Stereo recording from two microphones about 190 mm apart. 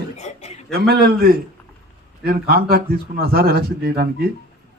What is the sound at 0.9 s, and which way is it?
A man's voice, 55° right (ahead or behind).